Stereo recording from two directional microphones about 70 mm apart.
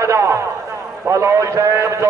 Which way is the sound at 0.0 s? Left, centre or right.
Right.